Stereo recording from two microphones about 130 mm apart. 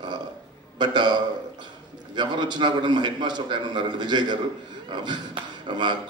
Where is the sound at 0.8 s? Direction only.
35° right (ahead or behind).